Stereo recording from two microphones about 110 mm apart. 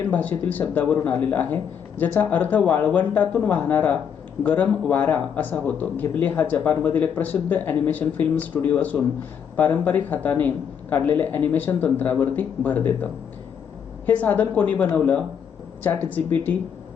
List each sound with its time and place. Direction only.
0.1 s speech: 15° left (ahead or behind)
14.1 s speech: 15° left (ahead or behind)